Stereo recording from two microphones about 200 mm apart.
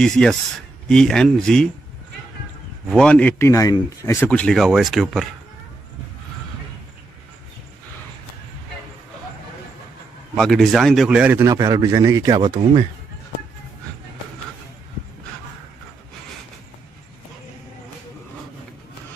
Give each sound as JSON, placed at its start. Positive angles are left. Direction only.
{"t": 0.0, "sound": "speech", "side_deg": 5}
{"t": 2.9, "sound": "speech", "side_deg": 5}
{"t": 10.3, "sound": "a man's voice", "side_deg": 0}